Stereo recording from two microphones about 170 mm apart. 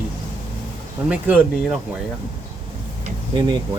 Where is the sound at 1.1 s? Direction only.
10° right (ahead or behind).